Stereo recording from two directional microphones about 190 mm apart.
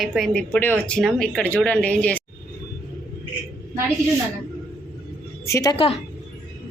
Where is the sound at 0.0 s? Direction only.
Centre (ahead or behind).